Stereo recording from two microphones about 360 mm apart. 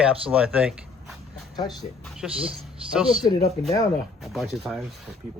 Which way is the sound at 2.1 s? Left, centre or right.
Centre.